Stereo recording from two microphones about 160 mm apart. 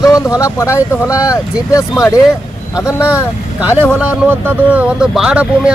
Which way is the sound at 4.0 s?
10° right (ahead or behind).